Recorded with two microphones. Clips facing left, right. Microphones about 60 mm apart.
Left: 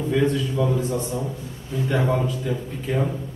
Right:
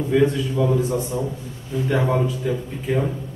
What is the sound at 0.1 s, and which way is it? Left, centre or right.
A man's voice, centre.